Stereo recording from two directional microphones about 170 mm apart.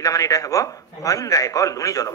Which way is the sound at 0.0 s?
20° left (ahead or behind).